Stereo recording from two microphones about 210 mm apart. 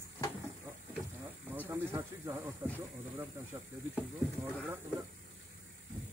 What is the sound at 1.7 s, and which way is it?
Speech, 15° right (ahead or behind).